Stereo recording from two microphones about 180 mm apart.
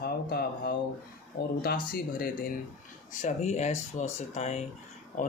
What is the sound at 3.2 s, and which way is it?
Speech, 40° left (ahead or behind).